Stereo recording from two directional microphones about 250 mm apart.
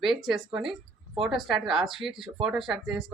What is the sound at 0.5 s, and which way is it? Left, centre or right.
Speech, centre.